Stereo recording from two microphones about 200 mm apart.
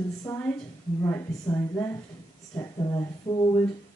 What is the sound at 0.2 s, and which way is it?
Speech, 10° left (ahead or behind).